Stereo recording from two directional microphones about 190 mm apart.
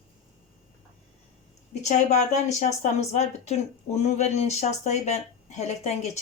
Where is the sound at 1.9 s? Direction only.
40° left (ahead or behind).